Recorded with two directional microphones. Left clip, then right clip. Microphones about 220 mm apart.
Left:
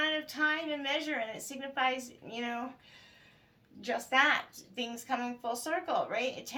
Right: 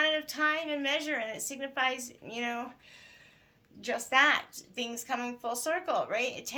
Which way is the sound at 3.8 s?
45° right (ahead or behind).